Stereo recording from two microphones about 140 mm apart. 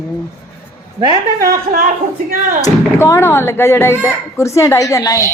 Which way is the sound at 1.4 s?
90° right.